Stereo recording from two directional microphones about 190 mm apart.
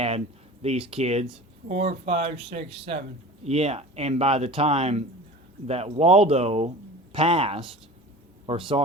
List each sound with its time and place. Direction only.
0.6 s speech: 30° right (ahead or behind)